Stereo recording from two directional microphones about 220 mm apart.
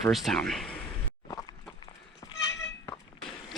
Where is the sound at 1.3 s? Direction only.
15° left (ahead or behind).